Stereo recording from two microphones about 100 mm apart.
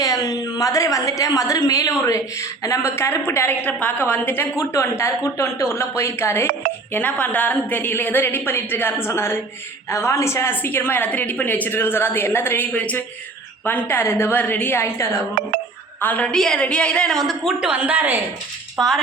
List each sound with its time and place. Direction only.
0.0 s a woman's voice: 40° left (ahead or behind); by 17.7 s centre (ahead or behind)
17.7 s a woman's voice: 15° right (ahead or behind)
18.8 s speech: 5° left (ahead or behind)